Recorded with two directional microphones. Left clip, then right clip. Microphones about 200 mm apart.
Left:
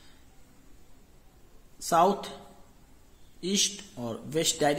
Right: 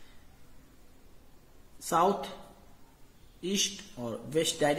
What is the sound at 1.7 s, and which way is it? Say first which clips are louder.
Speech: left 3 dB; 30° left (ahead or behind).